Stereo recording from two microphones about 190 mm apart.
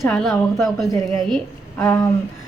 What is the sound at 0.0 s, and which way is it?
A woman's voice, centre (ahead or behind).